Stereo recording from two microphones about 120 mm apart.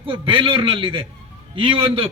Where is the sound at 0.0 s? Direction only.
45° right (ahead or behind).